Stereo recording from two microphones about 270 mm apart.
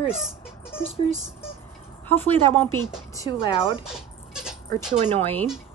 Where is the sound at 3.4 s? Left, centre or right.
Centre.